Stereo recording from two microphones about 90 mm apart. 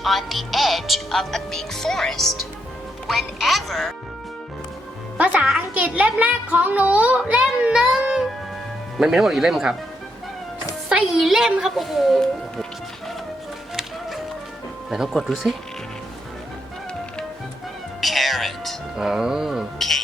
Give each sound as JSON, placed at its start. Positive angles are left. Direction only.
{"t": 0.0, "sound": "speech", "side_deg": 0}
{"t": 5.1, "sound": "a woman's voice", "side_deg": -15}
{"t": 10.8, "sound": "speech", "side_deg": -10}
{"t": 14.8, "sound": "speech", "side_deg": -5}
{"t": 18.0, "sound": "speech", "side_deg": 0}